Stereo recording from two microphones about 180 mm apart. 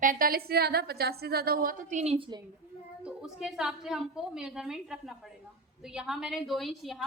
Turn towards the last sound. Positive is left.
turn(degrees=0)  # may be behind; listen again after turning